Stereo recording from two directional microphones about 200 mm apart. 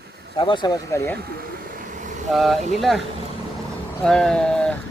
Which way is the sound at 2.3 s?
Centre (ahead or behind).